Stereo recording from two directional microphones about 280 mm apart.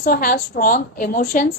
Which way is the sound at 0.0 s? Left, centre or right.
Left.